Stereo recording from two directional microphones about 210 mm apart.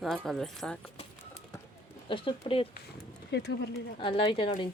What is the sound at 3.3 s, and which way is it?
Speech, 55° left (ahead or behind).